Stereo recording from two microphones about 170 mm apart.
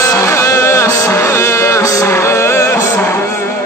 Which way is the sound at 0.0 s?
20° left (ahead or behind).